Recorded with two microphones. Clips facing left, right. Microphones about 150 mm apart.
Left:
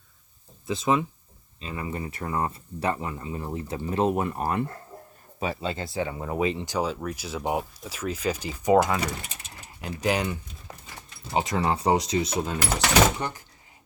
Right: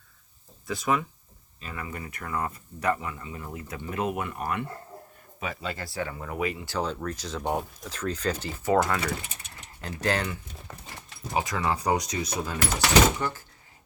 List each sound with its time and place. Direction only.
0.7 s speech: 25° left (ahead or behind)
6.7 s speech: 10° left (ahead or behind)
11.2 s speech: 30° left (ahead or behind)